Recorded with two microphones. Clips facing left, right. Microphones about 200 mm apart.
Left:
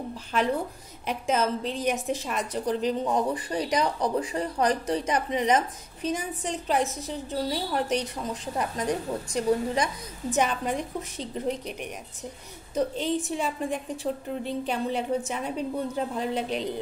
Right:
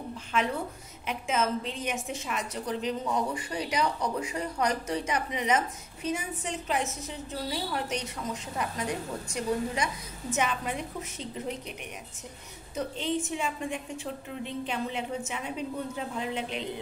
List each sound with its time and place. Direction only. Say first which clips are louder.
0.3 s a woman's voice: left 3 dB; 35° left (ahead or behind)
12.7 s a woman's voice: left 4 dB; 35° left (ahead or behind)